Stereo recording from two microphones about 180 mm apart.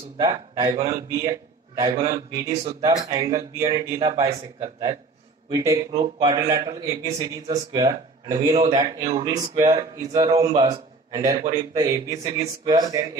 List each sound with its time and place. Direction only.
0.2 s speech: 20° right (ahead or behind)
5.5 s speech: 20° right (ahead or behind)